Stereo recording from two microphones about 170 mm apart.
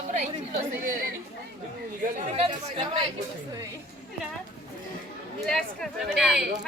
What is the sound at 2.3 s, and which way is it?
Chatter, 35° right (ahead or behind).